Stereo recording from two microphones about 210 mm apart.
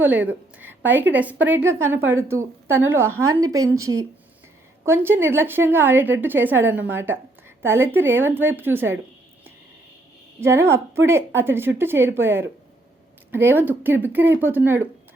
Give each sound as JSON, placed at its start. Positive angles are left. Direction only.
{"t": 0.0, "sound": "a woman's voice", "side_deg": -5}
{"t": 10.4, "sound": "a woman's voice", "side_deg": -10}